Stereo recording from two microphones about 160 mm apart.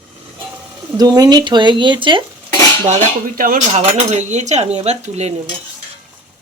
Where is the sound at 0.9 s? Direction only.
25° right (ahead or behind).